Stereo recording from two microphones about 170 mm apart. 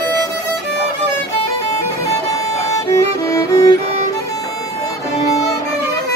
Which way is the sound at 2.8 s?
20° left (ahead or behind).